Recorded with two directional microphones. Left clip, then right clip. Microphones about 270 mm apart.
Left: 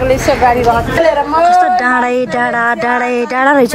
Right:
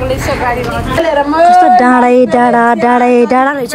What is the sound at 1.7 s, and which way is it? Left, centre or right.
Speech, centre.